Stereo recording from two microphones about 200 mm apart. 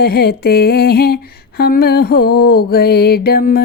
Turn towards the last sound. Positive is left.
turn(degrees=50)  # may be behind; listen again after turning